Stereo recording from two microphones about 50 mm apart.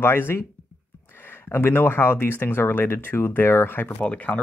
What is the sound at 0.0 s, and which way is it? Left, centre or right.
Speech, left.